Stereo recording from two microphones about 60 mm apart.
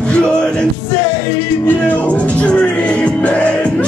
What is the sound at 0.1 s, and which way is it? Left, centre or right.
Music, centre.